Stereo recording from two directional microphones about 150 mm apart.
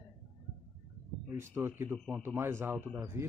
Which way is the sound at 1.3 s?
15° right (ahead or behind).